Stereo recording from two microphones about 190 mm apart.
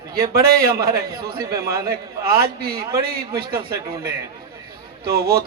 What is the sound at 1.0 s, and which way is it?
Speech, 20° right (ahead or behind).